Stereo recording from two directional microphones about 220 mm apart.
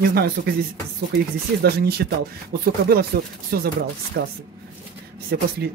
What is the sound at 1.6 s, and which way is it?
Speech, 45° right (ahead or behind).